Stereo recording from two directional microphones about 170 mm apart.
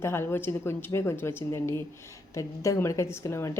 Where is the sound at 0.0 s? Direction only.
15° left (ahead or behind).